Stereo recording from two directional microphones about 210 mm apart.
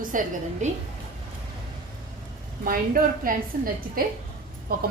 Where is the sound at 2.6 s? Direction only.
40° right (ahead or behind).